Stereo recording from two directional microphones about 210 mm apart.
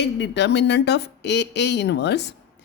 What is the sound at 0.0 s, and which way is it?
Speech, 55° left (ahead or behind).